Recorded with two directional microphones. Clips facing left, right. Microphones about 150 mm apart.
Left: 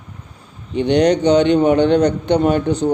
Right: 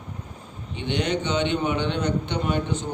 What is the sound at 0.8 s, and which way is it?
A man's voice, 40° left (ahead or behind).